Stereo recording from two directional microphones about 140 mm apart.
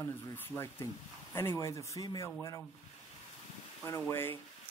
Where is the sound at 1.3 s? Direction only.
20° left (ahead or behind).